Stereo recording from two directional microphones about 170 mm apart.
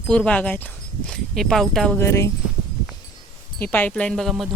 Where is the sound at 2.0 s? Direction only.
15° left (ahead or behind).